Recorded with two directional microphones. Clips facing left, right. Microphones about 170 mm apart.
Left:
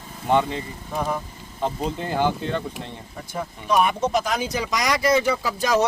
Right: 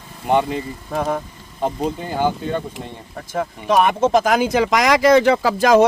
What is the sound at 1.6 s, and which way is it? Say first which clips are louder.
Speech: right 4 dB; 5° right (ahead or behind).